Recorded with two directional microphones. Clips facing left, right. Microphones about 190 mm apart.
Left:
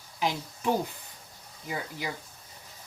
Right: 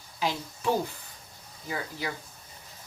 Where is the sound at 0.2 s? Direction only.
15° left (ahead or behind).